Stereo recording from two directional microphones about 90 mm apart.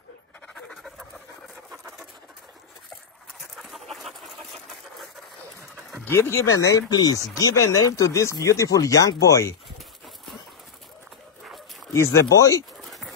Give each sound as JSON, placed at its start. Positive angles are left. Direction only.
{"t": 0.7, "sound": "dog", "side_deg": 0}
{"t": 3.5, "sound": "chicken", "side_deg": 0}
{"t": 6.0, "sound": "speech", "side_deg": 25}
{"t": 6.9, "sound": "speech", "side_deg": 45}
{"t": 11.9, "sound": "speech", "side_deg": 35}
{"t": 12.8, "sound": "a sound", "side_deg": 0}